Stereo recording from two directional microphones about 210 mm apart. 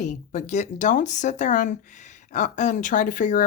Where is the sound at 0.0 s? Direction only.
35° left (ahead or behind).